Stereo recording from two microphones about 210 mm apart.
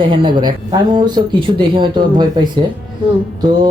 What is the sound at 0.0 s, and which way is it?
Speech, 25° right (ahead or behind).